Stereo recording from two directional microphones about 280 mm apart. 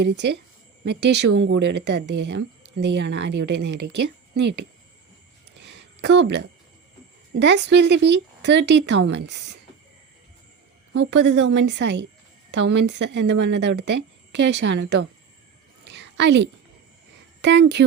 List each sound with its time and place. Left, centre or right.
0.0 s speech: right
5.5 s a sound: right
7.3 s speech: right
10.9 s a woman's voice: right
13.8 s a woman's voice: right
14.8 s speech: right
15.8 s a sound: right
17.4 s speech: right